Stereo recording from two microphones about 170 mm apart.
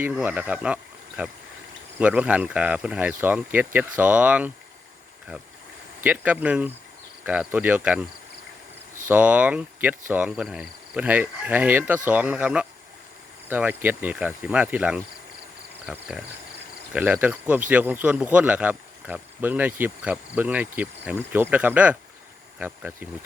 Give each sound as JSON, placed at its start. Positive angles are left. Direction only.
{"t": 0.0, "sound": "speech", "side_deg": -10}
{"t": 6.0, "sound": "speech", "side_deg": -10}
{"t": 9.0, "sound": "speech", "side_deg": -10}